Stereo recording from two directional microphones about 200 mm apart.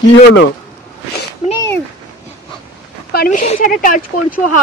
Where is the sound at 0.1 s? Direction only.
60° left (ahead or behind).